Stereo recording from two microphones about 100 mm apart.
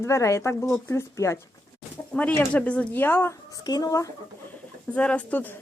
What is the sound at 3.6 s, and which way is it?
Speech, 40° left (ahead or behind).